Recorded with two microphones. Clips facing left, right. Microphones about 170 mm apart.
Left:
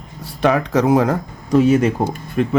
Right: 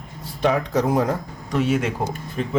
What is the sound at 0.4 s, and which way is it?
Speech, 75° left (ahead or behind).